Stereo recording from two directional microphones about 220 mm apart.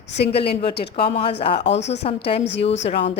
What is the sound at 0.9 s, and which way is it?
Speech, 25° left (ahead or behind).